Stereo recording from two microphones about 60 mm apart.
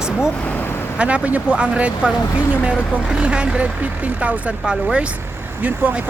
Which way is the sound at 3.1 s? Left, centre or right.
Centre.